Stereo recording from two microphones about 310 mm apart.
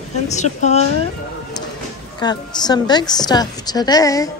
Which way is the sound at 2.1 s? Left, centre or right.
Centre.